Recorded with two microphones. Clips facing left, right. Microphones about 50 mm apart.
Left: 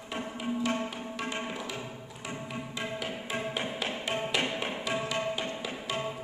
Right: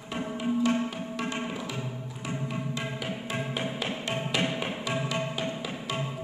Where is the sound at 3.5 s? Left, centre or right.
Centre.